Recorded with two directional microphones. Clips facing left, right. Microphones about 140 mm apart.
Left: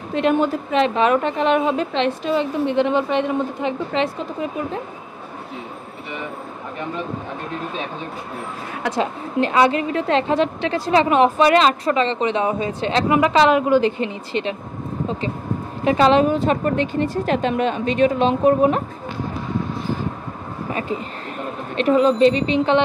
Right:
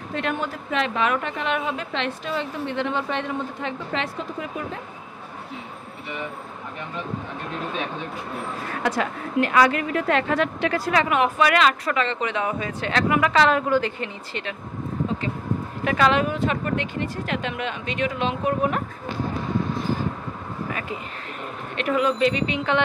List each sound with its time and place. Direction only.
0.1 s a woman's voice: 20° left (ahead or behind)
8.9 s a woman's voice: 25° left (ahead or behind)
21.7 s a woman's voice: 30° left (ahead or behind)